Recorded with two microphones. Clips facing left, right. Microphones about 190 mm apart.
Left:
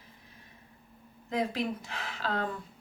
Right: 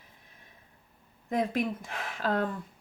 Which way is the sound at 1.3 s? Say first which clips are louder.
Right 2 dB; 50° right (ahead or behind).